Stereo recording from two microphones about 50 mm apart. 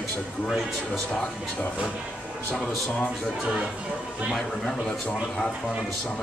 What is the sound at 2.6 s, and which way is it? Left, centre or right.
Speech, centre.